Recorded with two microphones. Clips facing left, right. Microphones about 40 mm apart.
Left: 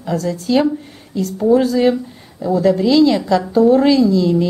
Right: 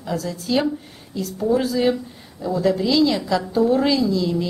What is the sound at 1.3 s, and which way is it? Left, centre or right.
A woman's voice, centre.